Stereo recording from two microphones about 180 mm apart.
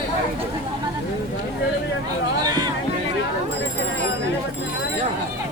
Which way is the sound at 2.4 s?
20° right (ahead or behind).